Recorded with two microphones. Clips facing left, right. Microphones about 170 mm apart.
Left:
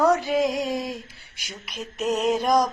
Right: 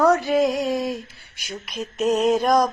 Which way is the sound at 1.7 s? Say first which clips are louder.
Right 4 dB; 45° right (ahead or behind).